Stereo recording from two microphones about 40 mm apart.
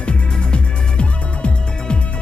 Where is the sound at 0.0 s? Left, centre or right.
Left.